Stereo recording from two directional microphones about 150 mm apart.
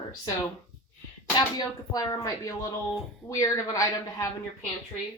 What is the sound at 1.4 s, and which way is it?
Speech, 25° left (ahead or behind).